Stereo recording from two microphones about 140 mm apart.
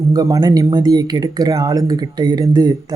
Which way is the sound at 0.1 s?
25° right (ahead or behind).